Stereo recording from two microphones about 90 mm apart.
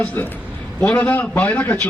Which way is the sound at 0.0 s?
20° left (ahead or behind).